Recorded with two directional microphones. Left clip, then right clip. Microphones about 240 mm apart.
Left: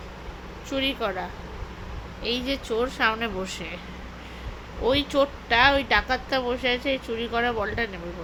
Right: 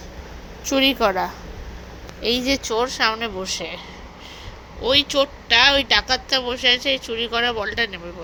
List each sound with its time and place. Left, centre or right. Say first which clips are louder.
0.7 s a woman's voice: right 9 dB; right
4.9 s a woman's voice: right 4 dB; right